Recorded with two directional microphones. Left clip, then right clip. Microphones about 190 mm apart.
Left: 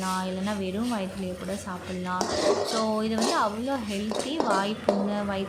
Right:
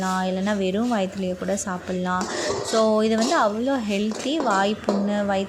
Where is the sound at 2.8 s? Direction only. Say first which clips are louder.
Right 6 dB; 30° right (ahead or behind).